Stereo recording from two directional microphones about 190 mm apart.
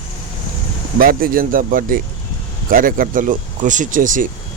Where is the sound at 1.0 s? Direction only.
50° right (ahead or behind).